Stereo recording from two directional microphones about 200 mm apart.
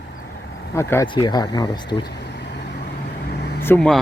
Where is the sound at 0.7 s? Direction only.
15° left (ahead or behind).